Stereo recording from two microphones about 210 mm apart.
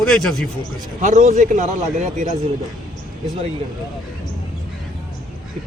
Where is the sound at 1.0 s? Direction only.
35° right (ahead or behind).